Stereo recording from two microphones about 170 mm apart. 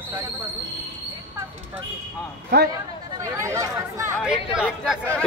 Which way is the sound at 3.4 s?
20° right (ahead or behind).